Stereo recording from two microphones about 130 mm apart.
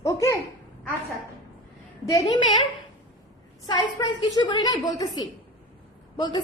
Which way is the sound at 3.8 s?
35° left (ahead or behind).